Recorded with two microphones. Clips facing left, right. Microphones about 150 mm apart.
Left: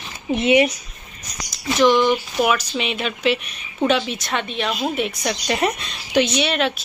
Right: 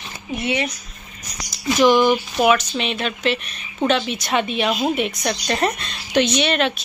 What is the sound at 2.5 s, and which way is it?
Speech, 5° left (ahead or behind).